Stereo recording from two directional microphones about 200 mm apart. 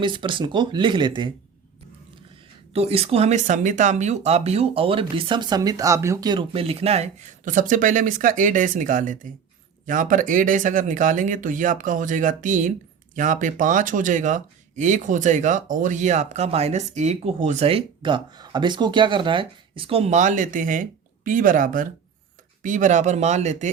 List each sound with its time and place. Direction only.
0.0 s speech: 25° right (ahead or behind)
2.7 s speech: 30° right (ahead or behind)